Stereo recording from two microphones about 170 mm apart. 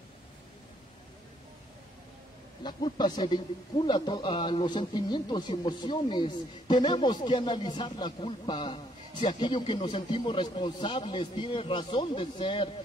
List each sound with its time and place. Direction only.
2.6 s speech: 25° left (ahead or behind)